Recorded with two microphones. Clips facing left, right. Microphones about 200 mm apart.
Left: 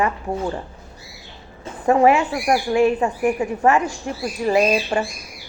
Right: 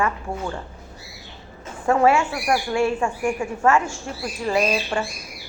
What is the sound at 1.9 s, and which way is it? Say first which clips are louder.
A woman's voice: left 3 dB; 15° left (ahead or behind).